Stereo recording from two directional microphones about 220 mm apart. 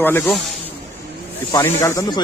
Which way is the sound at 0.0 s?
5° left (ahead or behind).